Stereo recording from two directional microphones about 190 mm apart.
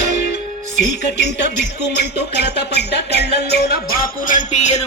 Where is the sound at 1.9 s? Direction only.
60° left (ahead or behind).